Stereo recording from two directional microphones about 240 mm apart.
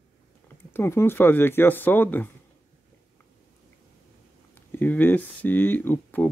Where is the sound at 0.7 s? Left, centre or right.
Centre.